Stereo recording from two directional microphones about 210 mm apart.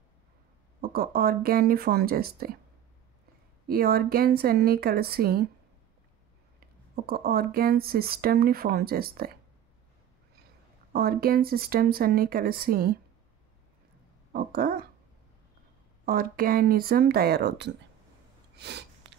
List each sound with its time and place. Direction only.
0.7 s speech: 45° right (ahead or behind)
3.6 s speech: 45° right (ahead or behind)
6.6 s speech: 45° right (ahead or behind)
10.9 s speech: 45° right (ahead or behind)
14.3 s speech: 45° right (ahead or behind)
16.1 s speech: 45° right (ahead or behind)
18.6 s a sound: 55° right (ahead or behind)